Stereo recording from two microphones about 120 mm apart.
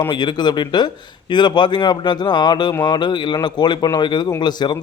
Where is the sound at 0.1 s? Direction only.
40° left (ahead or behind).